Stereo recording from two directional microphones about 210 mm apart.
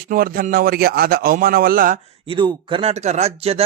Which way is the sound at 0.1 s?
45° right (ahead or behind).